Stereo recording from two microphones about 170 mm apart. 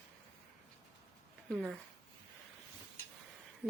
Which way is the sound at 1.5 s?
5° left (ahead or behind).